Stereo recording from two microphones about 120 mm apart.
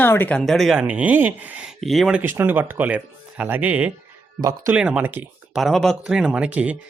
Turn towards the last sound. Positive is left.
turn(degrees=-10)  # may be behind; listen again after turning